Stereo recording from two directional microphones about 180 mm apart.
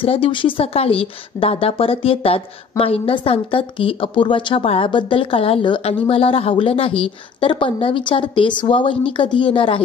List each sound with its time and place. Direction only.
0.0 s a woman's voice: 30° left (ahead or behind)